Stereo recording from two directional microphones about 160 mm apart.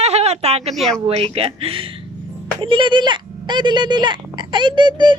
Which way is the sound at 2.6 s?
30° right (ahead or behind).